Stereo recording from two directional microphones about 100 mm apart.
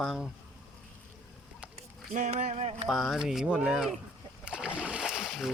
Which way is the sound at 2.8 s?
5° right (ahead or behind).